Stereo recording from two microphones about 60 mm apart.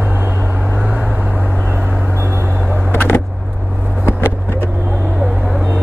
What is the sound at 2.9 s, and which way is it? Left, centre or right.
Vehicle, left.